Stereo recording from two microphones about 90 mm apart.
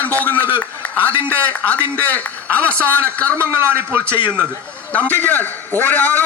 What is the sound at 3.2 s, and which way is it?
Speech, 25° right (ahead or behind).